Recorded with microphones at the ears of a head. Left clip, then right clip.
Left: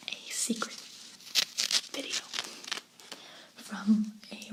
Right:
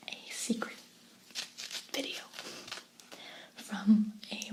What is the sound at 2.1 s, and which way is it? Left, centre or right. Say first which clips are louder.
Whispering: left 8 dB; left.